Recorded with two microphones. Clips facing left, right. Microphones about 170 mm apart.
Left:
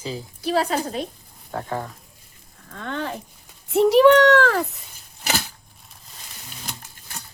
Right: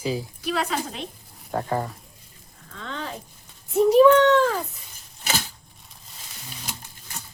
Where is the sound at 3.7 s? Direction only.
80° left.